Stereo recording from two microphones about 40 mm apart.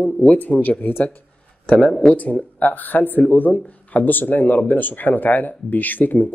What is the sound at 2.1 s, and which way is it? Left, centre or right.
Speech, left.